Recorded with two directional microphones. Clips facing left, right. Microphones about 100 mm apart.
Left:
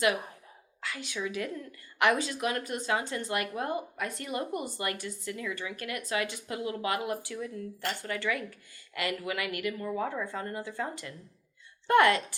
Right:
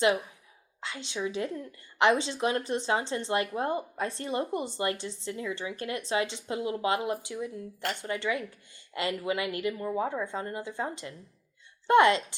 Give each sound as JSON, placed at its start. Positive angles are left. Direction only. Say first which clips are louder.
{"t": 0.8, "sound": "a woman's voice", "louder": "right 2 dB", "side_deg": -25}